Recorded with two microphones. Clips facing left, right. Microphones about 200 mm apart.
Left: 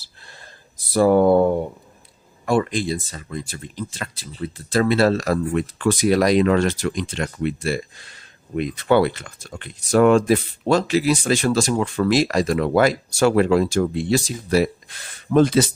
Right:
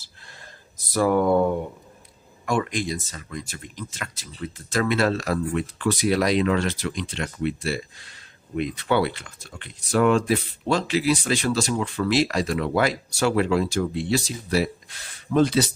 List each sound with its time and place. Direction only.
0.9 s speech: 30° left (ahead or behind); by 15.7 s 50° left (ahead or behind)